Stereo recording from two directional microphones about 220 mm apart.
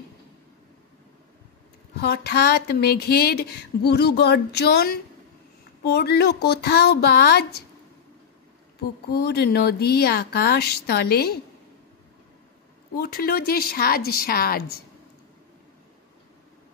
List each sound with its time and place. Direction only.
2.0 s speech: 50° left (ahead or behind)
9.1 s speech: 45° left (ahead or behind)
12.9 s speech: 45° left (ahead or behind)